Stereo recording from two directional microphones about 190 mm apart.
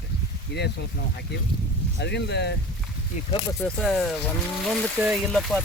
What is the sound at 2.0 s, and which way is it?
Speech, 60° left (ahead or behind).